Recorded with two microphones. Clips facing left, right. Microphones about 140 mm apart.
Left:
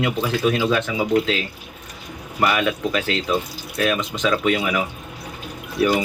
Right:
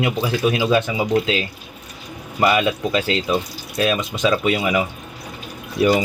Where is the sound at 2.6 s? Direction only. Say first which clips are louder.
Right 2 dB; 15° right (ahead or behind).